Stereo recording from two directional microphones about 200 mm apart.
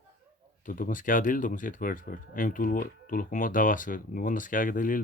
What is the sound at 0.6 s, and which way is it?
Speech, 40° left (ahead or behind).